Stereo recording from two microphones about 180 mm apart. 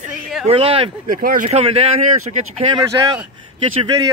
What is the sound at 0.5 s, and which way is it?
Speech, 30° right (ahead or behind).